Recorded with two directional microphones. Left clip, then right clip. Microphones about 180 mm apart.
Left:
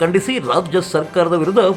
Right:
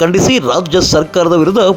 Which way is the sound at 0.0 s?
30° right (ahead or behind).